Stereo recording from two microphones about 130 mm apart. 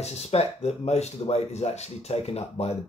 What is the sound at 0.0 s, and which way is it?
Speech, 55° left (ahead or behind).